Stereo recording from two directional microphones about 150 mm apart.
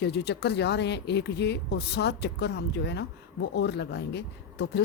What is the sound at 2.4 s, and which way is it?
Speech, 90° left.